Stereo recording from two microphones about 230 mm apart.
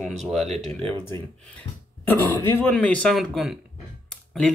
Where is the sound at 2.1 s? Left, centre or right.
Centre.